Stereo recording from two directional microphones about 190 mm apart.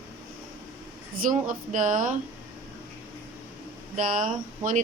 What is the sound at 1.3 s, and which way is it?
Speech, 40° right (ahead or behind).